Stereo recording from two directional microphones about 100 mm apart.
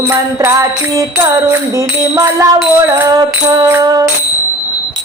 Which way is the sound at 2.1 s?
30° right (ahead or behind).